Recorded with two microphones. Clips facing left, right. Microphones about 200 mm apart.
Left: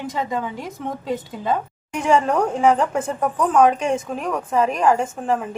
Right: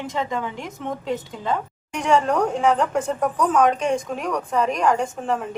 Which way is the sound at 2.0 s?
5° left (ahead or behind).